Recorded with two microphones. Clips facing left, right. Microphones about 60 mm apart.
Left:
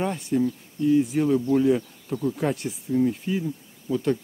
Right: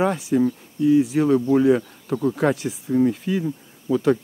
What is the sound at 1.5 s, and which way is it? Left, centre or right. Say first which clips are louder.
Speech: right 4 dB; right.